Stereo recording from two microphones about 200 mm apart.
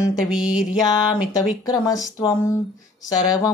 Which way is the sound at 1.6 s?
15° left (ahead or behind).